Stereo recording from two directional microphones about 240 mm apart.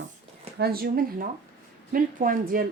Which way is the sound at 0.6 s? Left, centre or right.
Right.